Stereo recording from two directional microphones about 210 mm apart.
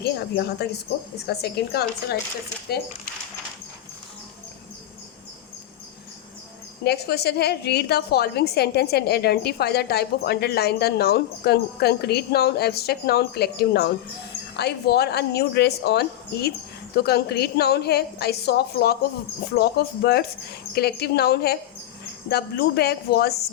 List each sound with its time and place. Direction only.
0.0 s a woman's voice: 50° left (ahead or behind)
6.8 s a woman's voice: 50° left (ahead or behind)